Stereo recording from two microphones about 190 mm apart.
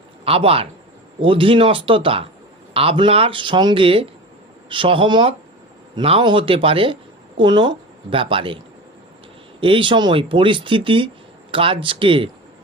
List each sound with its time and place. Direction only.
0.3 s a man's voice: 30° right (ahead or behind)
9.6 s speech: 25° right (ahead or behind)